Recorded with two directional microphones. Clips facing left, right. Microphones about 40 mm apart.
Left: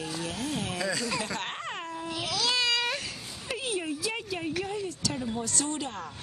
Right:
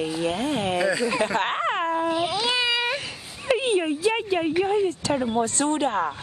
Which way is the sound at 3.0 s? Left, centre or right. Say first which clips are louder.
Right 10 dB; right.